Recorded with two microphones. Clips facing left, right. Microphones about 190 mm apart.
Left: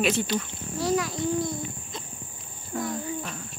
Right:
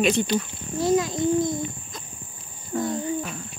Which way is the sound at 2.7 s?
5° right (ahead or behind).